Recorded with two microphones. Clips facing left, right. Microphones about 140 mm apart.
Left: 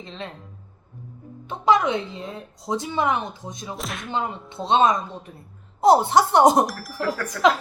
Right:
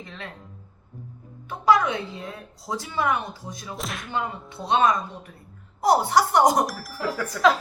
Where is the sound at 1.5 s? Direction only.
20° left (ahead or behind).